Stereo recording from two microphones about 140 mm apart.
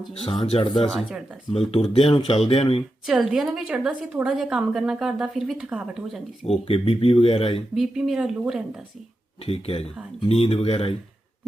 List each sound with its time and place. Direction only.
0.1 s speech: 45° left (ahead or behind)
0.6 s speech: 35° left (ahead or behind)
0.9 s a woman's voice: centre (ahead or behind)
1.5 s speech: 45° left (ahead or behind)
3.1 s a woman's voice: 5° right (ahead or behind)
6.4 s speech: 45° left (ahead or behind)
7.8 s a woman's voice: 5° right (ahead or behind)
9.5 s speech: 45° left (ahead or behind)